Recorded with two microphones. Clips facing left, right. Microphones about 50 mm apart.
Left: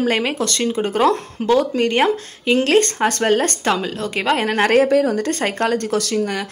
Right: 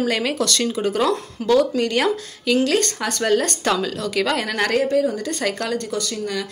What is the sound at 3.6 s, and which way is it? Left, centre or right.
A woman's voice, left.